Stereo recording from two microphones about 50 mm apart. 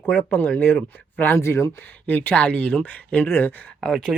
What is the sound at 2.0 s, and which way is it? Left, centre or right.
Speech, left.